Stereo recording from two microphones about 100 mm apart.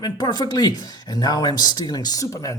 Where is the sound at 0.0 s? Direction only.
45° left (ahead or behind).